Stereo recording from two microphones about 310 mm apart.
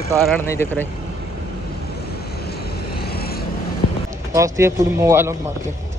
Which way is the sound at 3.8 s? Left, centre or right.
Left.